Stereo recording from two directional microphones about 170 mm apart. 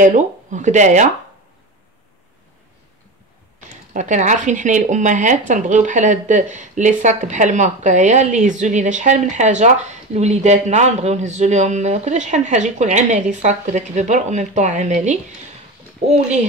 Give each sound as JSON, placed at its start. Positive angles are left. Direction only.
{"t": 0.0, "sound": "speech", "side_deg": -45}
{"t": 3.9, "sound": "speech", "side_deg": -45}